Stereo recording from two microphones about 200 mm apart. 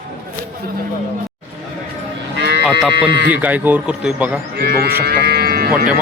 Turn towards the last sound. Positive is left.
turn(degrees=-50)  # may be behind; listen again after turning